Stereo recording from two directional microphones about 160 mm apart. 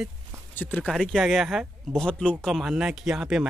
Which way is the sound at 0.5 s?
10° left (ahead or behind).